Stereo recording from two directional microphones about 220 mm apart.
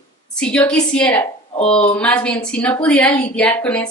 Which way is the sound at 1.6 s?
25° left (ahead or behind).